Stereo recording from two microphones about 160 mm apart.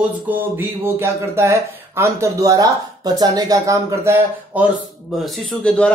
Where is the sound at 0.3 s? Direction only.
15° right (ahead or behind).